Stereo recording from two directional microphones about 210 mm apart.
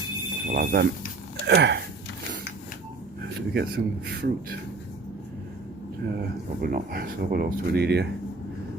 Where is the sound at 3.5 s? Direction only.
45° right (ahead or behind).